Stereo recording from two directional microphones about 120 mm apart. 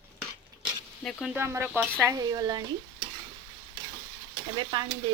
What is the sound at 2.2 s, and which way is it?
Stir, 35° right (ahead or behind).